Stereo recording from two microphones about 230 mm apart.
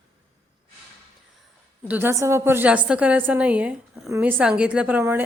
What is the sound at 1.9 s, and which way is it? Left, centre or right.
A woman's voice, centre.